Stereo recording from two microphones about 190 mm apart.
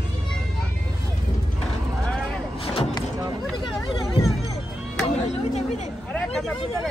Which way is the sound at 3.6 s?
25° left (ahead or behind).